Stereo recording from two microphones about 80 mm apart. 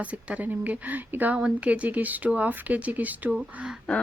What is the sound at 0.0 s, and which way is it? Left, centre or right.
A woman's voice, centre.